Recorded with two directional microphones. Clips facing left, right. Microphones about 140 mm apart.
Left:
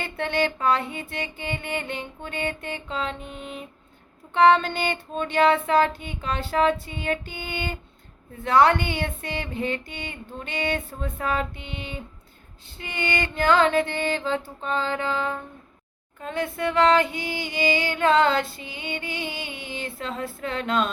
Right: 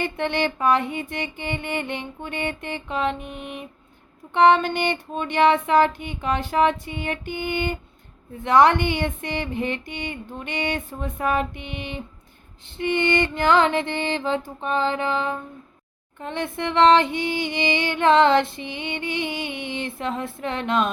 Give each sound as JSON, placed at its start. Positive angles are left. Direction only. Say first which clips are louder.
{"t": 0.0, "sound": "music", "louder": "right 1 dB", "side_deg": -20}
{"t": 8.4, "sound": "female singing", "louder": "right 2 dB", "side_deg": -20}
{"t": 11.5, "sound": "music", "louder": "right 3 dB", "side_deg": -15}
{"t": 12.6, "sound": "female singing", "louder": "right 8 dB", "side_deg": -20}